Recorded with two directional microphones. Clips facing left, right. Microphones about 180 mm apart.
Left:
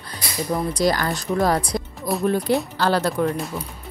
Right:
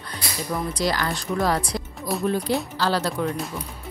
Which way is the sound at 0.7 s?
45° left (ahead or behind).